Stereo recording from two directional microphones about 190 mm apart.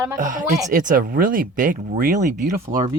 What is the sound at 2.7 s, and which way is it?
Speech, 20° right (ahead or behind).